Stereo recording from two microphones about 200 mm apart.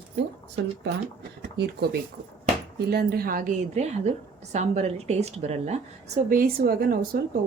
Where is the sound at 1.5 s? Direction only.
55° right (ahead or behind); by 5.8 s 35° right (ahead or behind).